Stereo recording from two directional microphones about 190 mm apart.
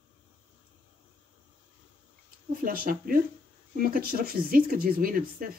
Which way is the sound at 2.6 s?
50° right (ahead or behind).